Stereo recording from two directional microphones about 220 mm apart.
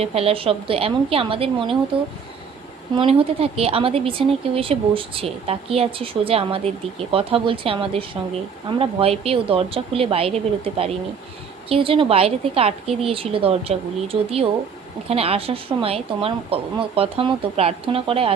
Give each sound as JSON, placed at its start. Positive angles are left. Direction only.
{"t": 0.0, "sound": "speech", "side_deg": -25}
{"t": 2.9, "sound": "speech", "side_deg": -25}